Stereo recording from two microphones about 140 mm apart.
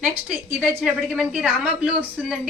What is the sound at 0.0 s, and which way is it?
A woman's voice, 15° right (ahead or behind).